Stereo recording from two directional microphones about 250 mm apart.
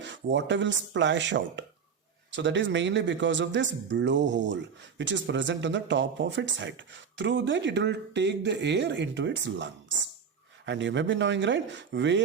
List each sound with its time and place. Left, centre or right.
0.0 s a man's voice: right